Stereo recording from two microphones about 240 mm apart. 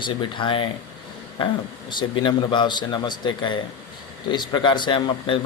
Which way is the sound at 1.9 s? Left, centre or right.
Centre.